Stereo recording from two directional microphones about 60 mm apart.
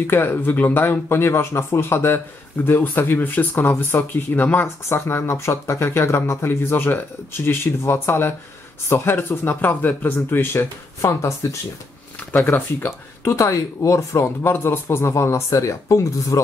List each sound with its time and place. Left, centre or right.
0.0 s a man's voice: left
4.8 s speech: left
6.4 s a man's voice: left
10.4 s speech: left
11.0 s speech: left
12.4 s speech: left
13.3 s speech: left
14.2 s speech: left